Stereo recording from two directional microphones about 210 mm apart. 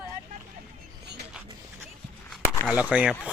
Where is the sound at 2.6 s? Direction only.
5° right (ahead or behind).